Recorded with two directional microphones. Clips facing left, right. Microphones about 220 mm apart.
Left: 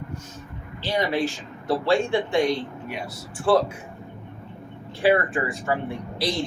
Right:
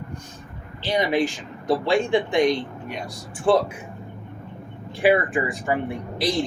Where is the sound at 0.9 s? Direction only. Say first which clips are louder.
Right 2 dB; 15° right (ahead or behind).